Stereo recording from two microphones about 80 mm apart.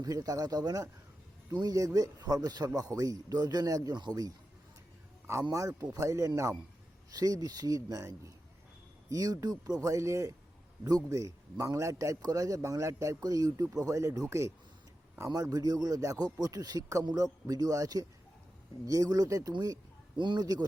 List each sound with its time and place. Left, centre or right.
0.0 s a man's voice: right
5.2 s a man's voice: right
15.3 s a man's voice: right
20.1 s speech: right